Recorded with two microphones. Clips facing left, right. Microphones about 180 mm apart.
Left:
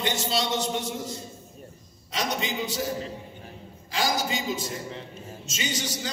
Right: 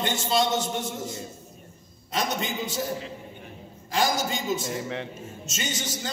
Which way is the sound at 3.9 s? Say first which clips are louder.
Right 2 dB; 50° right (ahead or behind).